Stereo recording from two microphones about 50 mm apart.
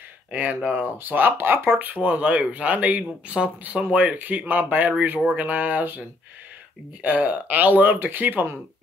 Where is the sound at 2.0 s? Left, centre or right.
Right.